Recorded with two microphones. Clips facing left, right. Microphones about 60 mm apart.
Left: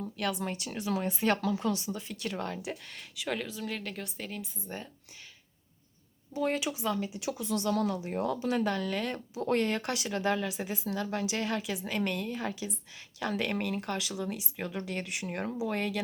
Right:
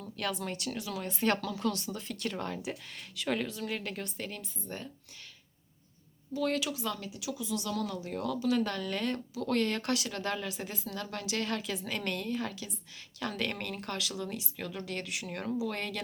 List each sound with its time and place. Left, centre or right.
0.2 s speech: centre
0.8 s speech: left
1.0 s speech: centre
1.9 s speech: centre
6.3 s speech: left
7.2 s speech: left
7.9 s speech: left
8.6 s speech: centre
9.3 s speech: left